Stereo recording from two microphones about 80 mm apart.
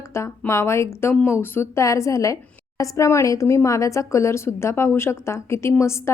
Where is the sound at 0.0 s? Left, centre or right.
Left.